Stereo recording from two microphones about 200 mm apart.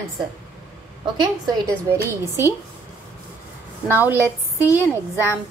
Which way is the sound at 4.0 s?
10° right (ahead or behind).